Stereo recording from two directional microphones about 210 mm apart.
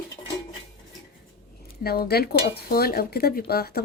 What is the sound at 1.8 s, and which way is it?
Speech, 50° left (ahead or behind).